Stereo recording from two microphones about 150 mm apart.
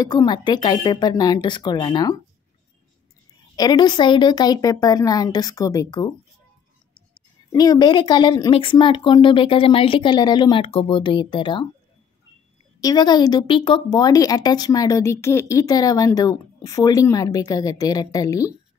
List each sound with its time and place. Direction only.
0.0 s speech: 25° left (ahead or behind)
3.5 s speech: 25° left (ahead or behind)
7.5 s speech: 25° left (ahead or behind)
12.8 s speech: 30° left (ahead or behind)
13.8 s speech: 25° left (ahead or behind)